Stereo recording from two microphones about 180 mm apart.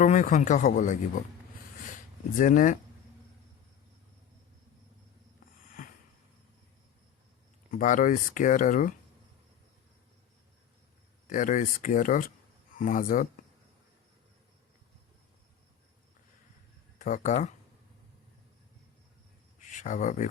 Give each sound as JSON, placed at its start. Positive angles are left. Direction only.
{"t": 0.0, "sound": "speech", "side_deg": 45}
{"t": 2.4, "sound": "speech", "side_deg": 45}
{"t": 5.8, "sound": "a sound", "side_deg": 50}
{"t": 7.7, "sound": "speech", "side_deg": 45}
{"t": 11.3, "sound": "speech", "side_deg": 45}
{"t": 17.0, "sound": "speech", "side_deg": 45}
{"t": 19.5, "sound": "a sound", "side_deg": 45}